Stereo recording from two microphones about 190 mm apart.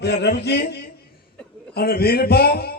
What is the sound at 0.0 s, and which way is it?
A man's voice, 60° left (ahead or behind).